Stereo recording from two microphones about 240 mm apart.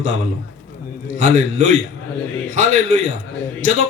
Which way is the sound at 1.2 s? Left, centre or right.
Right.